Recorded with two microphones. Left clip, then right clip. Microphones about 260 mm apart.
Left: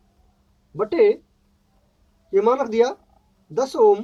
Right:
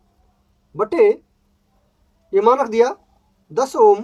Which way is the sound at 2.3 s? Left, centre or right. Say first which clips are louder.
Right 4 dB; centre.